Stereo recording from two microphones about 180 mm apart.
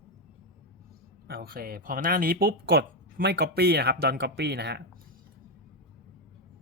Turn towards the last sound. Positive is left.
turn(degrees=-70)  # may be behind; listen again after turning